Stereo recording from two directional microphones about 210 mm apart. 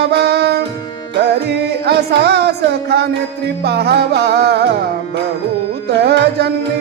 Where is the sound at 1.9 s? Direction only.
50° right (ahead or behind).